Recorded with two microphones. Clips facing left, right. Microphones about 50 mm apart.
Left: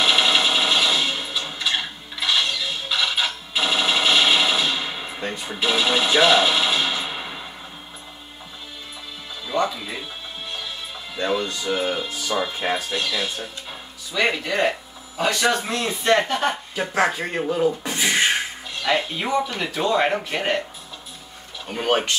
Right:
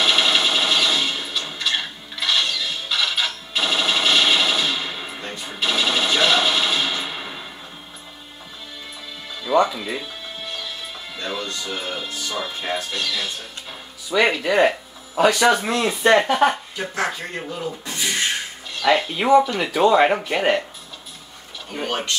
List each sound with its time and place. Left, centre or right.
0.0 s sewing machine: centre
5.2 s a sound: centre
5.5 s a sound: centre
9.5 s music: centre
11.1 s speech: centre
14.4 s speech: centre
17.0 s speech: centre
18.0 s beatboxing: left
18.9 s speech: centre
19.1 s speech: centre
20.3 s speech: centre
21.7 s speech: left